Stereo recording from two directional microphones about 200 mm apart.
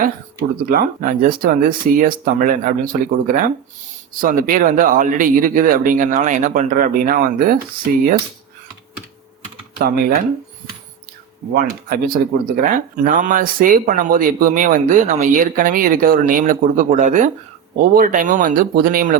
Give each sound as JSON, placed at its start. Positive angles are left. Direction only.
{"t": 0.6, "sound": "speech", "side_deg": -40}
{"t": 9.7, "sound": "speech", "side_deg": -50}
{"t": 11.5, "sound": "speech", "side_deg": -45}